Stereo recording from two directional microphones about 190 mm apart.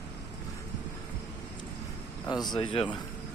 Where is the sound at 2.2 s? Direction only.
20° left (ahead or behind).